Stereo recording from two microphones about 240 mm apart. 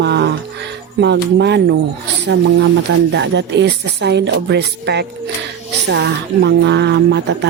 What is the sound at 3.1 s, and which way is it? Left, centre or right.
Speech, right.